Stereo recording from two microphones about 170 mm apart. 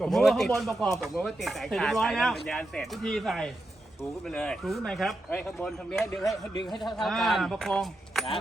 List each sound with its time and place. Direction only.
0.0 s speech: centre (ahead or behind)
6.7 s a man's voice: 25° left (ahead or behind)
6.9 s speech: centre (ahead or behind)